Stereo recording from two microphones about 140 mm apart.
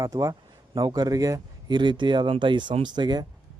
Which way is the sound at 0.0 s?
25° right (ahead or behind).